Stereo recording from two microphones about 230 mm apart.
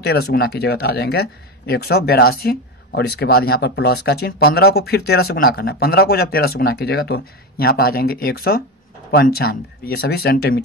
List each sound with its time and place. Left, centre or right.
0.0 s speech: left